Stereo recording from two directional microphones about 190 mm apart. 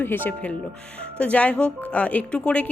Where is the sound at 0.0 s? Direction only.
10° left (ahead or behind).